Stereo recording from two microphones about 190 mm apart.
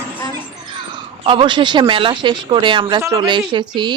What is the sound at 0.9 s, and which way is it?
Speech, 25° right (ahead or behind).